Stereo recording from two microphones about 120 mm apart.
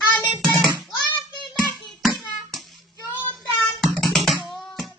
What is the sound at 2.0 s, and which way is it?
Music, centre (ahead or behind).